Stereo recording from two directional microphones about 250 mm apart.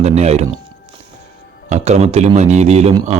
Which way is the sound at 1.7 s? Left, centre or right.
Right.